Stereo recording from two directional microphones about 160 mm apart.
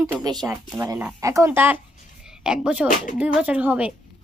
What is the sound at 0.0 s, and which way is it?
Speech, 25° right (ahead or behind).